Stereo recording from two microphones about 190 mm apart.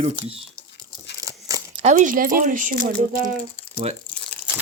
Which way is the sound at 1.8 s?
35° right (ahead or behind).